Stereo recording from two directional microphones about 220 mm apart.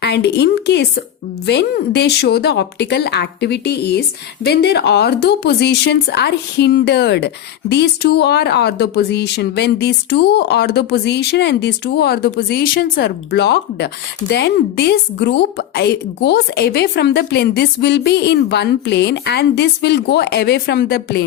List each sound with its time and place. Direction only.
0.0 s speech: 50° left (ahead or behind)